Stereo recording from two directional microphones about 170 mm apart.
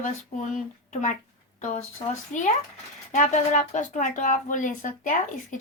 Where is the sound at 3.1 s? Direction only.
45° left (ahead or behind).